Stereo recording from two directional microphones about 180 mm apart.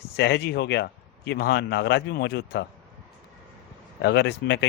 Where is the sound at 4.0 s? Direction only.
70° left (ahead or behind).